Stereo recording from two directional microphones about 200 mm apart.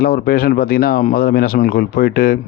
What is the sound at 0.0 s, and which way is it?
Speech, 50° left (ahead or behind).